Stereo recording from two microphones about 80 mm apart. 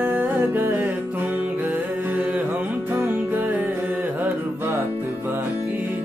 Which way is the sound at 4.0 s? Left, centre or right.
Right.